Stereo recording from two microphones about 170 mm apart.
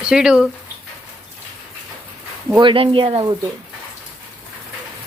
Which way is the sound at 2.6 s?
30° right (ahead or behind).